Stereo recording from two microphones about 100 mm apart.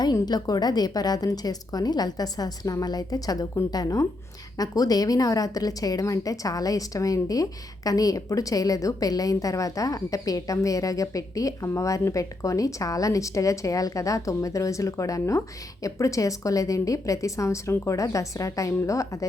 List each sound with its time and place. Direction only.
0.0 s a woman's voice: 45° left (ahead or behind)